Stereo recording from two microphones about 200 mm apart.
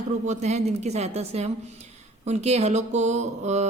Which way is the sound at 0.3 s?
35° right (ahead or behind).